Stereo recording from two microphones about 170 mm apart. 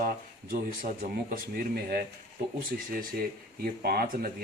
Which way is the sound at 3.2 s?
65° right (ahead or behind).